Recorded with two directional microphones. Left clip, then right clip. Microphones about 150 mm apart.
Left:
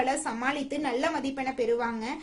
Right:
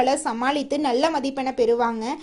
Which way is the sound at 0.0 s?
50° right (ahead or behind).